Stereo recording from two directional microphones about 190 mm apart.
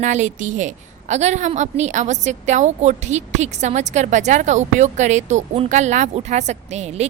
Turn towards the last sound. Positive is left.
turn(degrees=-35)  # may be behind; listen again after turning